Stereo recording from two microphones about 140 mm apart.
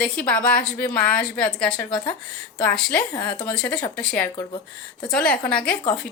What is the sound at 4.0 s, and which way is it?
A woman's voice, 10° left (ahead or behind).